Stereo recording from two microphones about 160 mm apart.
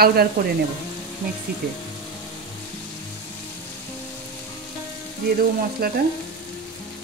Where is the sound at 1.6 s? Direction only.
90° right.